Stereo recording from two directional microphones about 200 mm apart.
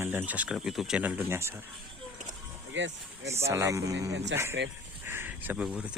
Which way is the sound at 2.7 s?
65° right (ahead or behind).